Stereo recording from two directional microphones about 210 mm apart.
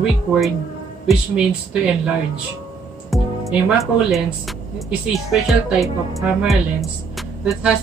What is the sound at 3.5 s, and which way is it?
Speech, centre (ahead or behind).